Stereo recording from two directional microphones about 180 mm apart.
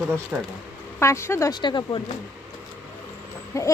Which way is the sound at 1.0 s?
15° left (ahead or behind).